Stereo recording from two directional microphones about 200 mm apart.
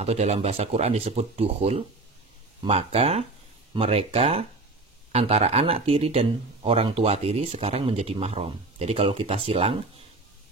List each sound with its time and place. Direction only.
0.0 s speech: 35° right (ahead or behind)